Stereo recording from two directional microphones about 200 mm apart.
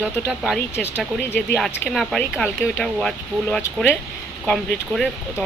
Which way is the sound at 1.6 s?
Centre (ahead or behind).